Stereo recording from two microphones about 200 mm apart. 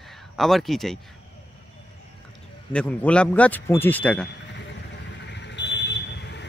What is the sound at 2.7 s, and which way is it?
Speech, 5° left (ahead or behind).